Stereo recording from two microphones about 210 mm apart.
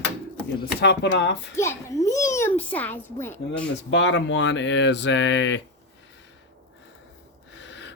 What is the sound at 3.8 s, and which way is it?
Speech, 60° left (ahead or behind).